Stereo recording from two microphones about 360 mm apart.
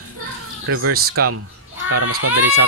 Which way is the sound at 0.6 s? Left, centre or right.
Right.